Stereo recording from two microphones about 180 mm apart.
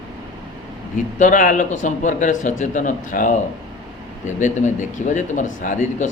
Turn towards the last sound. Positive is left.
turn(degrees=45)  # may be behind; listen again after turning